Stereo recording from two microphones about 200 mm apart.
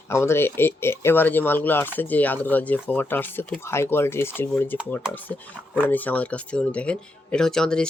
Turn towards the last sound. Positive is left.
turn(degrees=5)  # may be behind; listen again after turning